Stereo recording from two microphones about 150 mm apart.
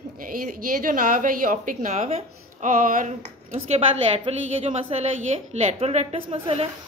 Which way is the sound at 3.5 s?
40° right (ahead or behind).